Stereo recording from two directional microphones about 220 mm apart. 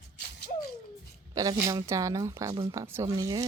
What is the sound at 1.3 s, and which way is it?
Speech, 15° right (ahead or behind).